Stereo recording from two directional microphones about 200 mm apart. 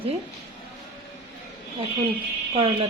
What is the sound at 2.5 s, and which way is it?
Speech, 25° right (ahead or behind).